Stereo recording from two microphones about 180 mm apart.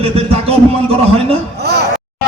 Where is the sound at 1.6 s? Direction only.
65° right (ahead or behind).